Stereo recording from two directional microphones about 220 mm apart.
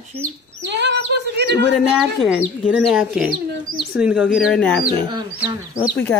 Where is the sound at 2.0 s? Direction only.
5° right (ahead or behind).